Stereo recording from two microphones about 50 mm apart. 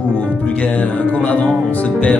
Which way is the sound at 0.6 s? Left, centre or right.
Left.